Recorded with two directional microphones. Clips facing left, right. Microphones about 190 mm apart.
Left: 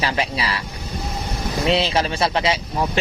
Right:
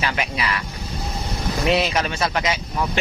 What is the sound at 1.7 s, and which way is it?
Speech, 30° left (ahead or behind).